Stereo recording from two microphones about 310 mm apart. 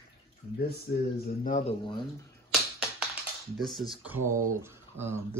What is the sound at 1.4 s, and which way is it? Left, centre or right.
Speech, left.